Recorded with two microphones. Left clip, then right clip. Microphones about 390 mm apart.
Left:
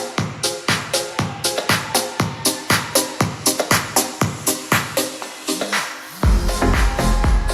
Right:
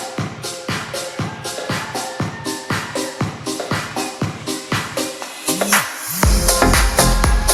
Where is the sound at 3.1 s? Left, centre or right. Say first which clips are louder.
Left 4 dB; left.